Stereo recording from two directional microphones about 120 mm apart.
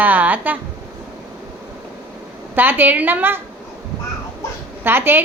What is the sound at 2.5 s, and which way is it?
Speech, 15° right (ahead or behind).